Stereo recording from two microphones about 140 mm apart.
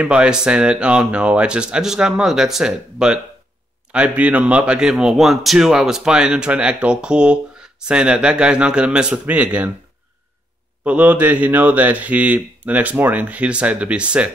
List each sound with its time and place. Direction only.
0.0 s speech: 10° right (ahead or behind)
10.8 s speech: 10° right (ahead or behind)